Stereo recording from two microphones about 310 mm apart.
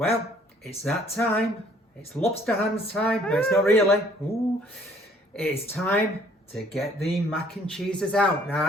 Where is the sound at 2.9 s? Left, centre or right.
Centre.